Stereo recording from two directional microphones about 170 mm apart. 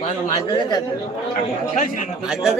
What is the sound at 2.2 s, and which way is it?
Speech, centre (ahead or behind).